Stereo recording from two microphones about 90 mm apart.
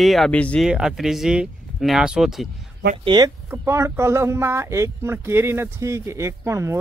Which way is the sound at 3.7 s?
30° right (ahead or behind).